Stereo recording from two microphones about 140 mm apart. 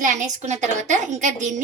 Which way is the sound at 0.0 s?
60° right (ahead or behind).